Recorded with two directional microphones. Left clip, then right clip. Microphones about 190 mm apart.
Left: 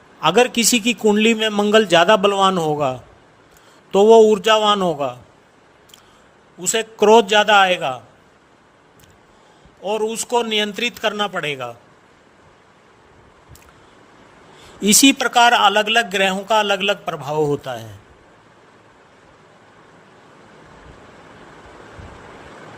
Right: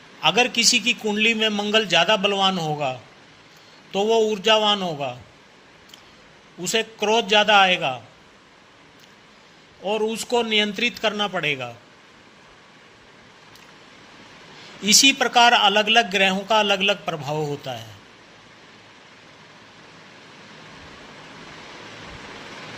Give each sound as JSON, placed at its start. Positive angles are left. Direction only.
{"t": 0.2, "sound": "a man's voice", "side_deg": 55}
{"t": 6.6, "sound": "a man's voice", "side_deg": 65}
{"t": 9.8, "sound": "a man's voice", "side_deg": 55}
{"t": 14.8, "sound": "speech", "side_deg": 70}